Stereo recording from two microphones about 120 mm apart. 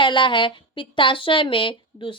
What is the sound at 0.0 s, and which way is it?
Speech, 40° left (ahead or behind).